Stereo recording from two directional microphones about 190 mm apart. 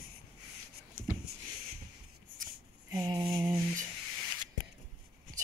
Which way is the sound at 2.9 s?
15° right (ahead or behind).